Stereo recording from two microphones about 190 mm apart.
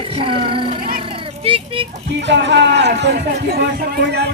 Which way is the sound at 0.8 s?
50° right (ahead or behind).